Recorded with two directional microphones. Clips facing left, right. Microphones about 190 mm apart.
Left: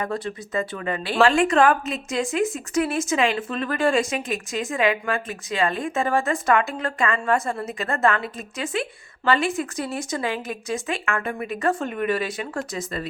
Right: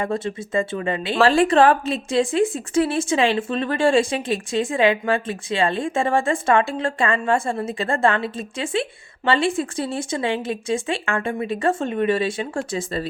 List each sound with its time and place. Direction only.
0.0 s a woman's voice: 25° right (ahead or behind)
1.2 s a woman's voice: 35° right (ahead or behind)